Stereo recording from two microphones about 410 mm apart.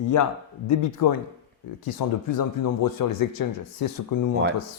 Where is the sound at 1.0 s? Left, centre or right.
Left.